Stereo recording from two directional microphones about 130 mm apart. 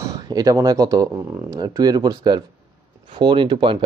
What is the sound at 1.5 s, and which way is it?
Speech, 30° right (ahead or behind).